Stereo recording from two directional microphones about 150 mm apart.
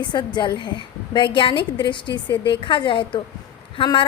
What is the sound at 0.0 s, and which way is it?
A woman's voice, 30° left (ahead or behind).